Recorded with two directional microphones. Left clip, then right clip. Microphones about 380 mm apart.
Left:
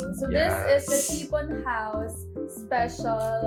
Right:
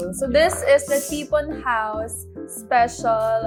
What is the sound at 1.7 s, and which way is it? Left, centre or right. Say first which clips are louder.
A woman's voice: right 7 dB; right.